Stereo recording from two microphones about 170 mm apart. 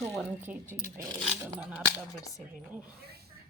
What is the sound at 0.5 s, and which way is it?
Speech, 5° right (ahead or behind).